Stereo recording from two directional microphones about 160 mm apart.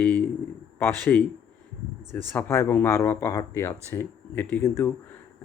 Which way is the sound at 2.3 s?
15° left (ahead or behind).